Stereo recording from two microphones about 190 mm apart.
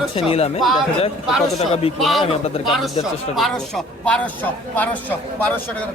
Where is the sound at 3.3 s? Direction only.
Centre (ahead or behind).